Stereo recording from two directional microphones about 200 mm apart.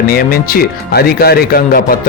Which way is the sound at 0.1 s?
50° left (ahead or behind).